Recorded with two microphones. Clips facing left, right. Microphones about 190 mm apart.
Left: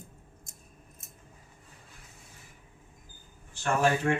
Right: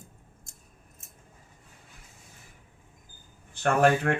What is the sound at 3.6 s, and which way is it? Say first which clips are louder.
Speech: right 4 dB; 60° right (ahead or behind).